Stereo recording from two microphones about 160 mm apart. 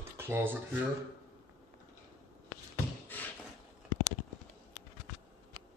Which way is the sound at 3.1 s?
10° left (ahead or behind).